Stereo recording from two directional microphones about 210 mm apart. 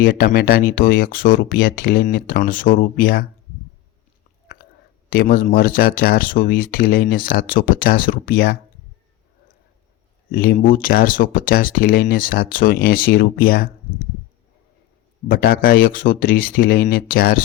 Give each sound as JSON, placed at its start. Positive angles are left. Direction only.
{"t": 0.0, "sound": "speech", "side_deg": 45}
{"t": 5.0, "sound": "speech", "side_deg": 45}
{"t": 10.3, "sound": "speech", "side_deg": 45}
{"t": 15.3, "sound": "speech", "side_deg": 45}